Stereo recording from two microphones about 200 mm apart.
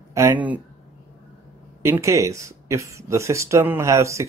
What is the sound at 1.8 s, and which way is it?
Speech, 15° right (ahead or behind).